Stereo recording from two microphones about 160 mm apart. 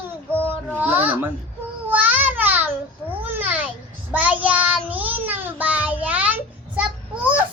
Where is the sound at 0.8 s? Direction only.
10° right (ahead or behind).